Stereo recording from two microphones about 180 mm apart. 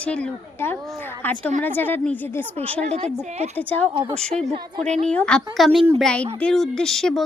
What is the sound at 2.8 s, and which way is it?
Speech, 35° right (ahead or behind).